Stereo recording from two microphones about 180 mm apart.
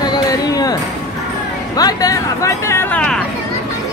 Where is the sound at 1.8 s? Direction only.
20° left (ahead or behind).